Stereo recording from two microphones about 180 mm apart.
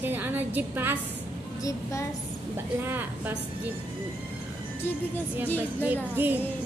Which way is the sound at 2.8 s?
10° right (ahead or behind).